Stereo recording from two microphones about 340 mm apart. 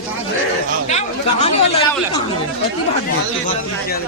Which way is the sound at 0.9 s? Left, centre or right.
Centre.